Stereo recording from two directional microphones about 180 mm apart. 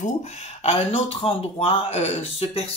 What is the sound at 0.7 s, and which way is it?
Speech, 35° left (ahead or behind).